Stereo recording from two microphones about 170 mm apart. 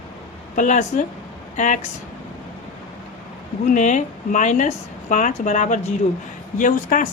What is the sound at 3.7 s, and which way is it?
Speech, 45° left (ahead or behind).